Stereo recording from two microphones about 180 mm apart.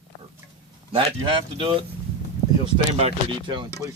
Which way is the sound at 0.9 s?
30° right (ahead or behind).